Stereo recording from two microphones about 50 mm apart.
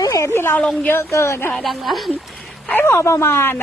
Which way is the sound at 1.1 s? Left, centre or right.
Left.